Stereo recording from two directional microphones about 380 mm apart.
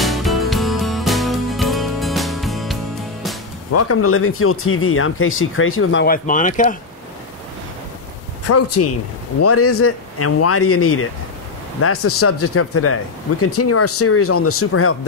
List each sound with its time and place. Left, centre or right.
0.0 s music: centre
3.7 s speech: left; by 6.8 s centre
8.5 s speech: left